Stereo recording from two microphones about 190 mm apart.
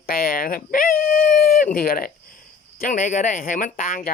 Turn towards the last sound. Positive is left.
turn(degrees=45)  # may be behind; listen again after turning